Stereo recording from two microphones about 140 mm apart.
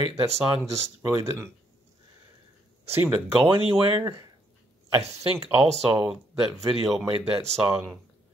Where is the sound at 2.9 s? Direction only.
15° right (ahead or behind).